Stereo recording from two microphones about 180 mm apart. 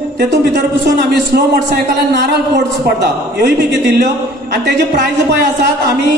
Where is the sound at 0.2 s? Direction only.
65° right (ahead or behind).